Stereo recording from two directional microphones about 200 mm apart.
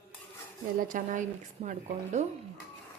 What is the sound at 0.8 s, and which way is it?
Speech, 40° right (ahead or behind).